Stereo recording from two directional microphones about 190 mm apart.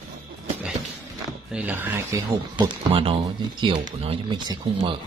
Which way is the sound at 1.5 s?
10° right (ahead or behind).